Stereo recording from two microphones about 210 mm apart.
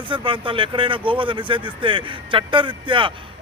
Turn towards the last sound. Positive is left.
turn(degrees=-25)  # may be behind; listen again after turning